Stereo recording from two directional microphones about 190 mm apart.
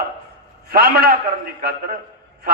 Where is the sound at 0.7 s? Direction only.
55° right (ahead or behind).